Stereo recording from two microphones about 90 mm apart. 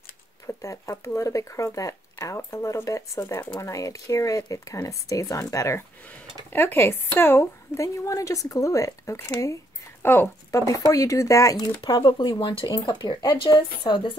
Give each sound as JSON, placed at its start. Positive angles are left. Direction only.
{"t": 0.6, "sound": "speech", "side_deg": 35}
{"t": 6.0, "sound": "speech", "side_deg": 25}
{"t": 10.0, "sound": "speech", "side_deg": 25}
{"t": 10.5, "sound": "speech", "side_deg": 35}
{"t": 11.8, "sound": "speech", "side_deg": 65}